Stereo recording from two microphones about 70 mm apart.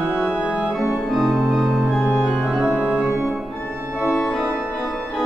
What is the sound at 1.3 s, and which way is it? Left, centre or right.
Music, centre.